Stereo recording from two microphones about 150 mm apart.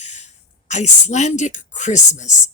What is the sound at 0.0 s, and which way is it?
A woman's voice, 50° left (ahead or behind).